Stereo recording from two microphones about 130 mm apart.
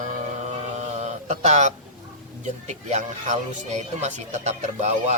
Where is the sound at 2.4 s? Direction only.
60° right (ahead or behind).